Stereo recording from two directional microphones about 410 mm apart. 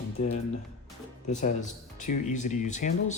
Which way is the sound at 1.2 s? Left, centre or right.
Centre.